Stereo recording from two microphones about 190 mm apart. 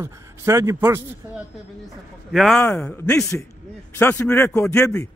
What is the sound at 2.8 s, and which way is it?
A man's voice, 15° left (ahead or behind).